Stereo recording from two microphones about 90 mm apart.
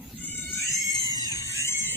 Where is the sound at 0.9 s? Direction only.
45° left (ahead or behind).